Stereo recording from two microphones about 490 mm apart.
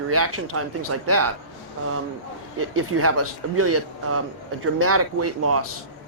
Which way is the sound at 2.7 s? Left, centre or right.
Right.